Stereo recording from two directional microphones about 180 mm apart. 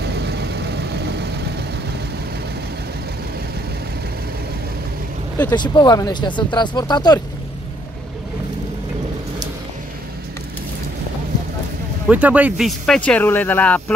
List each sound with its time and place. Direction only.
0.0 s vehicle: 65° right (ahead or behind)
5.5 s speech: 25° left (ahead or behind)
12.1 s speech: 10° right (ahead or behind)